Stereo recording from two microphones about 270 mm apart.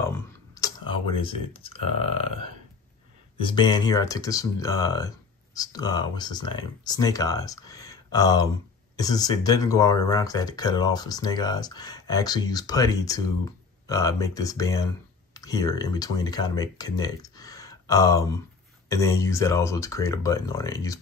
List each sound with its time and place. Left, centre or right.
0.6 s speech: centre
3.3 s speech: centre